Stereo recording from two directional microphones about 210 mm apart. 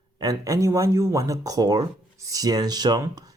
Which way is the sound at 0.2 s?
15° right (ahead or behind).